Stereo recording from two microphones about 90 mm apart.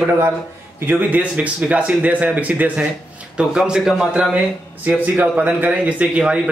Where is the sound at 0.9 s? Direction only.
20° right (ahead or behind).